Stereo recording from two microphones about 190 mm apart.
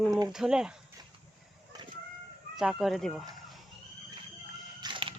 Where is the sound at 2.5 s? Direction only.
Centre (ahead or behind).